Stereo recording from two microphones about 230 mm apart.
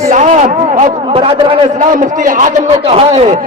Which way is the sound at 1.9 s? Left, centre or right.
Right.